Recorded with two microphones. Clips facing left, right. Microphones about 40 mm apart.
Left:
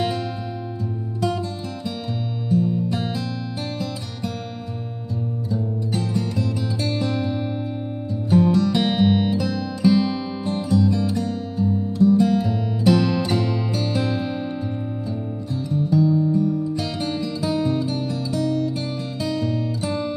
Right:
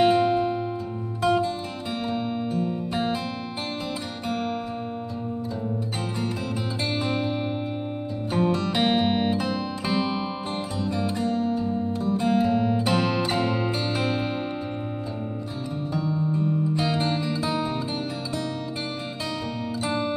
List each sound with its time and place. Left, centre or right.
0.0 s music: right
2.5 s music: right
6.8 s music: right
15.7 s music: centre
17.6 s music: centre
19.8 s music: right